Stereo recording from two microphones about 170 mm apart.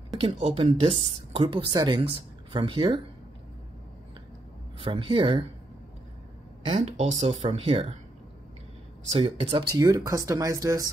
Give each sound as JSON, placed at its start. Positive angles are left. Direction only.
{"t": 0.2, "sound": "a woman's voice", "side_deg": -35}
{"t": 4.7, "sound": "a woman's voice", "side_deg": -30}
{"t": 6.6, "sound": "a woman's voice", "side_deg": -40}
{"t": 9.1, "sound": "speech", "side_deg": -35}